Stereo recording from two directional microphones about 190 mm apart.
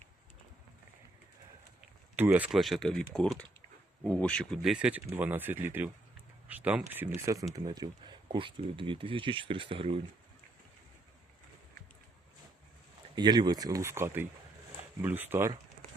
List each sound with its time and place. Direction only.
2.1 s speech: 10° right (ahead or behind)
7.5 s speech: 20° right (ahead or behind)
13.1 s speech: 20° right (ahead or behind)